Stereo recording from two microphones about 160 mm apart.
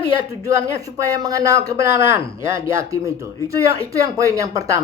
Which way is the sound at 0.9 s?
20° right (ahead or behind).